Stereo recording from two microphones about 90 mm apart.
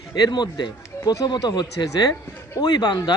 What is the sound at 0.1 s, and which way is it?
Speech, 50° left (ahead or behind).